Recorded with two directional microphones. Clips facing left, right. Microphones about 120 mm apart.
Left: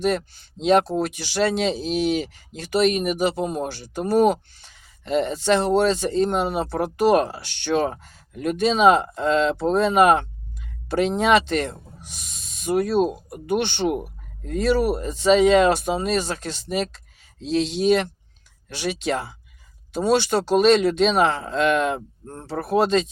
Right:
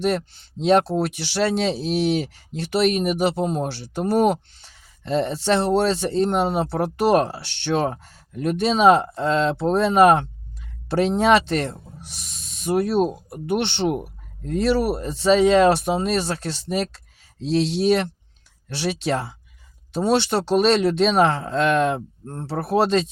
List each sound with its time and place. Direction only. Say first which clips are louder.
0.1 s speech: even; 35° right (ahead or behind)